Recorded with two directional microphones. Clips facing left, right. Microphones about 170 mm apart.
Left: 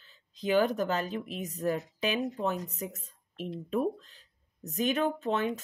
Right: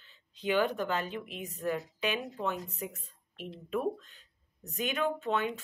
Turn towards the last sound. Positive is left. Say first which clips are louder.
# left 2 dB
turn(degrees=40)  # may be behind; listen again after turning